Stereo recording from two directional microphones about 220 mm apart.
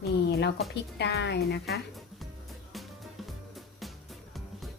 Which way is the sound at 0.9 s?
50° left (ahead or behind).